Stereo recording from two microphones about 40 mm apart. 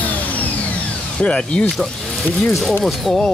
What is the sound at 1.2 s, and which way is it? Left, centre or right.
Speech, left.